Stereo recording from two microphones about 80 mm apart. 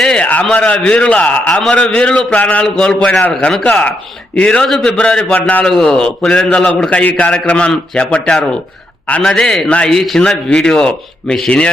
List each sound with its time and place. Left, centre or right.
0.0 s a sound: centre
0.5 s a man's voice: centre
3.3 s a man's voice: centre